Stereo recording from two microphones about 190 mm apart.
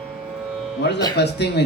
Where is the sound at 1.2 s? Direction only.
60° left (ahead or behind).